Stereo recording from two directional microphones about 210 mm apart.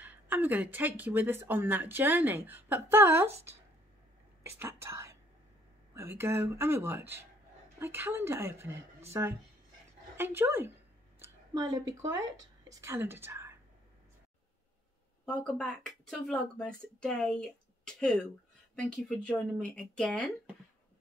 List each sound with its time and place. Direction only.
0.0 s speech: 10° right (ahead or behind)
11.1 s a sound: 15° right (ahead or behind)
12.0 s a woman's voice: 15° right (ahead or behind)
15.2 s speech: 5° left (ahead or behind)